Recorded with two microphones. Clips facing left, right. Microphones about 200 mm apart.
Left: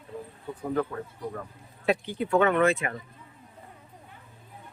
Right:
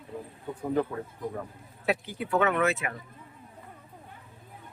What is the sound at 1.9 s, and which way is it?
Speech, 5° right (ahead or behind).